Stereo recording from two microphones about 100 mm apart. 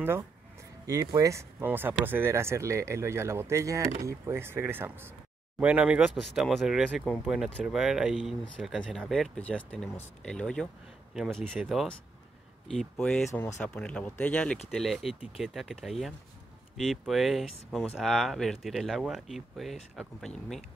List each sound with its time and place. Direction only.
0.8 s speech: 35° right (ahead or behind)
1.6 s speech: 20° right (ahead or behind); by 6.8 s centre (ahead or behind)
7.1 s speech: 20° left (ahead or behind)
7.6 s speech: 5° right (ahead or behind)
13.3 s speech: 30° left (ahead or behind)
13.6 s speech: 10° left (ahead or behind)
14.7 s speech: centre (ahead or behind)